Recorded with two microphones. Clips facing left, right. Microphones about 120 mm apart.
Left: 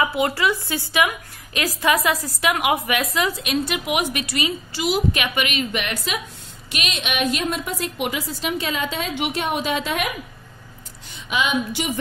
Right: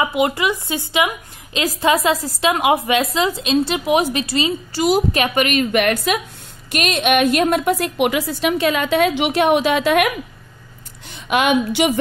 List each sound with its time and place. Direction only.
0.0 s a woman's voice: 20° right (ahead or behind)
4.7 s a woman's voice: 40° right (ahead or behind); by 10.1 s 70° right (ahead or behind)
11.2 s a woman's voice: 60° right (ahead or behind)